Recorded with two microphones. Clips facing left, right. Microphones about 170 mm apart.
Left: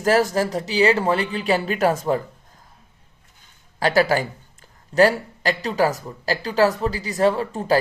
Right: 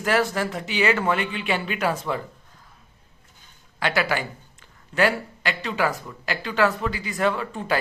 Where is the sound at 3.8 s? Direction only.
40° left (ahead or behind).